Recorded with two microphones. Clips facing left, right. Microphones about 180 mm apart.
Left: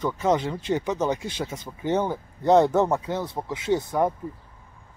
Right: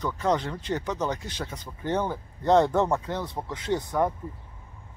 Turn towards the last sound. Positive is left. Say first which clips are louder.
# left 3 dB
turn(degrees=10)  # may be behind; listen again after turning